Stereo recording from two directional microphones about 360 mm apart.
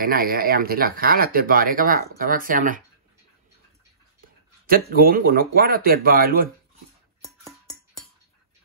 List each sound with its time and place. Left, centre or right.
0.0 s speech: right
4.6 s speech: right